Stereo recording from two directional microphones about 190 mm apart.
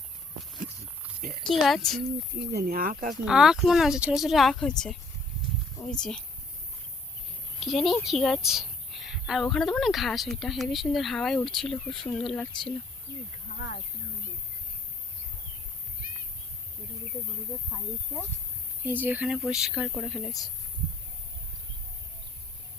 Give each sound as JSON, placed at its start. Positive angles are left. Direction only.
{"t": 1.5, "sound": "speech", "side_deg": 0}
{"t": 2.4, "sound": "speech", "side_deg": -55}
{"t": 3.1, "sound": "speech", "side_deg": -5}
{"t": 7.6, "sound": "speech", "side_deg": 0}
{"t": 17.7, "sound": "speech", "side_deg": 10}
{"t": 18.9, "sound": "speech", "side_deg": -10}